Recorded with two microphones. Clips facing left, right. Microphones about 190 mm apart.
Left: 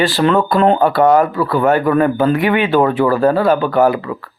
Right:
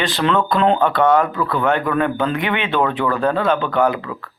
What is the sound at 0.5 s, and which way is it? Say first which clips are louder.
Speech: left 3 dB; 45° left (ahead or behind).